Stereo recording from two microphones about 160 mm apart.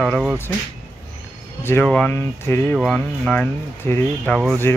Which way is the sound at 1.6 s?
10° left (ahead or behind).